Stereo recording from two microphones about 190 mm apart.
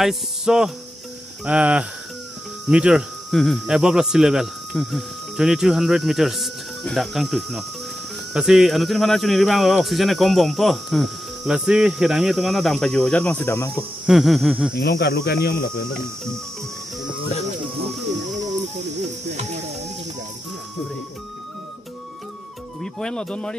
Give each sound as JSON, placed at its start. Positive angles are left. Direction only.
{"t": 0.0, "sound": "speech", "side_deg": -5}
{"t": 14.0, "sound": "speech", "side_deg": 0}
{"t": 14.7, "sound": "speech", "side_deg": 60}
{"t": 22.8, "sound": "speech", "side_deg": 5}